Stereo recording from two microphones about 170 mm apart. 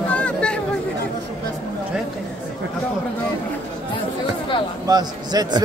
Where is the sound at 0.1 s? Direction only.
5° left (ahead or behind).